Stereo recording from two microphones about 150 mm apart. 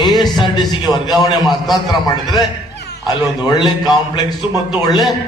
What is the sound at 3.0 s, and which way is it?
A man's voice, 30° left (ahead or behind).